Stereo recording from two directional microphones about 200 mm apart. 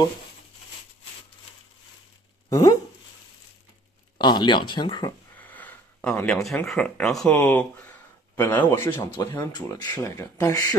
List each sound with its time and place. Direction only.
2.5 s speech: 15° left (ahead or behind)
4.2 s speech: 20° left (ahead or behind)
5.4 s a sound: 10° left (ahead or behind)
6.6 s speech: 5° left (ahead or behind)